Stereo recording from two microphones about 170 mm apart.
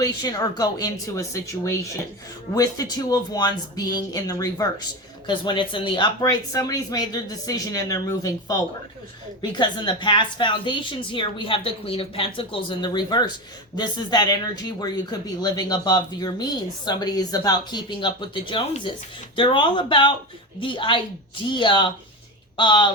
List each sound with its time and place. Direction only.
0.0 s speech: 25° left (ahead or behind)